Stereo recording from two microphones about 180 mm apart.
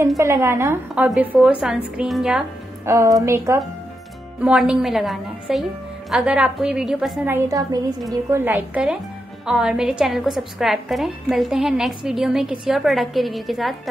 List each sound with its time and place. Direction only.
0.2 s a woman's voice: 15° right (ahead or behind)
2.8 s a woman's voice: 15° right (ahead or behind)
7.2 s a woman's voice: 15° right (ahead or behind); by 13.7 s centre (ahead or behind)